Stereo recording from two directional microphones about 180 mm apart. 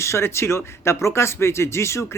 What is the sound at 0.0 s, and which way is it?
A man's voice, 15° left (ahead or behind).